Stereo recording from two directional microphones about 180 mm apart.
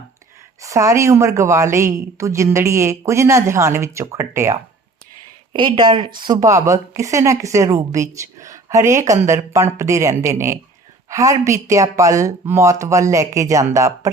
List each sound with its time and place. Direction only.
0.6 s a woman's voice: 15° right (ahead or behind)
5.5 s a woman's voice: 25° right (ahead or behind)